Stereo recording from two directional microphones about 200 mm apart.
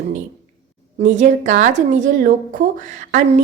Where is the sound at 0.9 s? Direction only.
35° right (ahead or behind).